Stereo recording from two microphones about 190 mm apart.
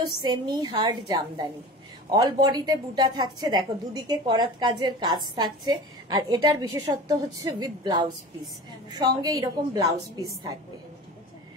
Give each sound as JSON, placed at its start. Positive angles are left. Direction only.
{"t": 0.0, "sound": "a woman's voice", "side_deg": -20}